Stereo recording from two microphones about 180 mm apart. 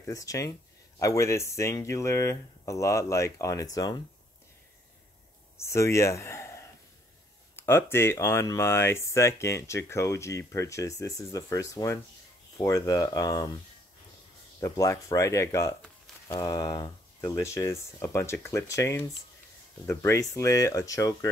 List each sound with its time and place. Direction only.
0.0 s speech: 20° left (ahead or behind)
5.7 s speech: 15° left (ahead or behind)
14.6 s speech: 20° left (ahead or behind)